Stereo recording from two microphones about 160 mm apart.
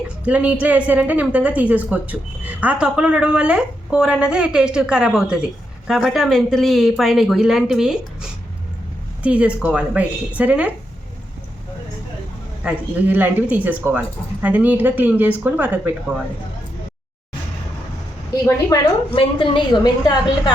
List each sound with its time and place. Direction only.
0.3 s speech: 10° right (ahead or behind)
12.6 s speech: 10° right (ahead or behind)
18.7 s a woman's voice: 25° left (ahead or behind)